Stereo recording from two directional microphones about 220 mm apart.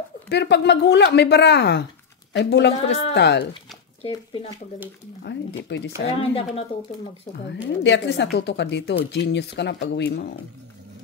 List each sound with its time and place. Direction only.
0.3 s speech: 50° left (ahead or behind)
4.0 s speech: 25° left (ahead or behind)
5.2 s speech: 50° left (ahead or behind)
6.1 s speech: 25° left (ahead or behind)
7.6 s speech: 55° left (ahead or behind)